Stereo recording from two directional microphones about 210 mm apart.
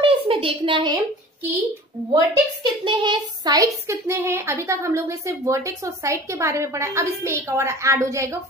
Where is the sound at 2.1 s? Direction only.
20° right (ahead or behind).